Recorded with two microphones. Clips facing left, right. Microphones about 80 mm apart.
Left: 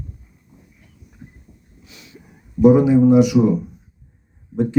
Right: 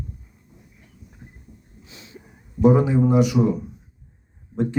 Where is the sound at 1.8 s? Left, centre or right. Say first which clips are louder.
Even; right.